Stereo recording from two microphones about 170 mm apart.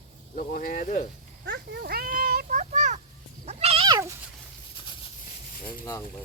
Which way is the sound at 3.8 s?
20° right (ahead or behind).